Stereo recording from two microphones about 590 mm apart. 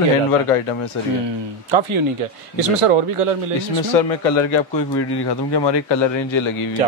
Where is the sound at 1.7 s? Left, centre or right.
Right.